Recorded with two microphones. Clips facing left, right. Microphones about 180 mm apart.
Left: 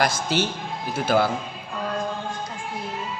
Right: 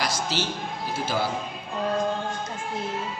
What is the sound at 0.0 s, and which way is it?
A man's voice, 55° left (ahead or behind).